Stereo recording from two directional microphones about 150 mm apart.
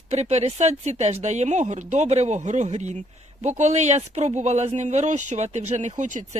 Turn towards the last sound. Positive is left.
turn(degrees=-55)  # may be behind; listen again after turning